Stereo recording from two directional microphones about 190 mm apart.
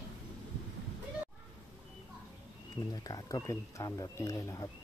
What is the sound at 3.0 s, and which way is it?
Speech, 20° left (ahead or behind).